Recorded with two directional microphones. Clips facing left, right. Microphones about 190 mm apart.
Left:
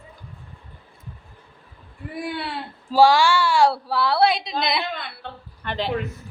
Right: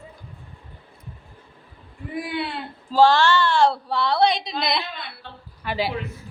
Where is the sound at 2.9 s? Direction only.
10° left (ahead or behind).